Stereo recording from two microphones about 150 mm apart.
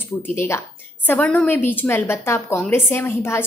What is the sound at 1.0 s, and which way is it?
A woman's voice, 10° left (ahead or behind).